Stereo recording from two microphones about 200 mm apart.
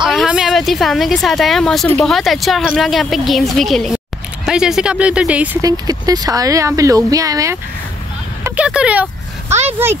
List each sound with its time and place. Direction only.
0.0 s speech: centre (ahead or behind)
5.6 s speech: 20° right (ahead or behind)
8.5 s speech: 5° right (ahead or behind)
9.5 s speech: 35° right (ahead or behind)